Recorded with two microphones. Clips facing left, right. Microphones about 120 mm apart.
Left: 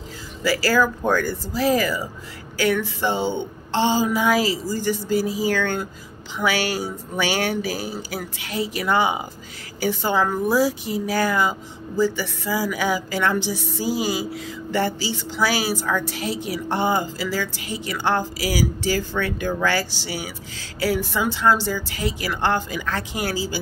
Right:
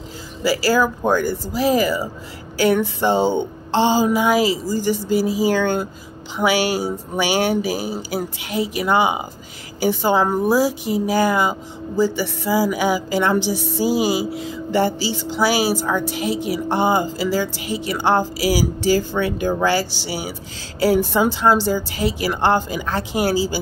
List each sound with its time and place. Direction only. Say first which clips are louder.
0.4 s a woman's voice: right 2 dB; 30° right (ahead or behind)
4.1 s speech: right 3 dB; 20° right (ahead or behind)
14.7 s speech: right 4 dB; 30° right (ahead or behind)
19.1 s a woman's voice: right 4 dB; 20° right (ahead or behind)